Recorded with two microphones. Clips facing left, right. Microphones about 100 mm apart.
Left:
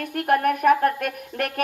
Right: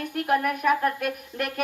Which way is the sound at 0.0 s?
55° left (ahead or behind).